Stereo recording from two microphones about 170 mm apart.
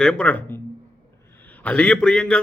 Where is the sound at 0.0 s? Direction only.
5° left (ahead or behind).